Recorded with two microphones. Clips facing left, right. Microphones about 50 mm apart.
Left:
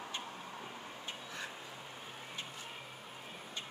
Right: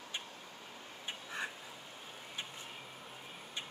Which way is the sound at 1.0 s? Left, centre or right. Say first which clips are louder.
Right 5 dB; right.